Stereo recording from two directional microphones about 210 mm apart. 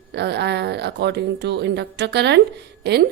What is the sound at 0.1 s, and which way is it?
A woman's voice, 55° right (ahead or behind).